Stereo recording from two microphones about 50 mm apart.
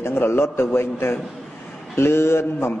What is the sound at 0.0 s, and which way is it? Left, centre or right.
A man's voice, left.